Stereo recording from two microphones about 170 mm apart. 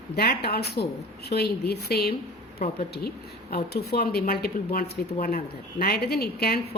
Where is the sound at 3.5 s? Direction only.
70° left (ahead or behind).